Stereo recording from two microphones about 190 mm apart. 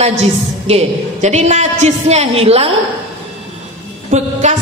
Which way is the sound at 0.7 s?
35° right (ahead or behind).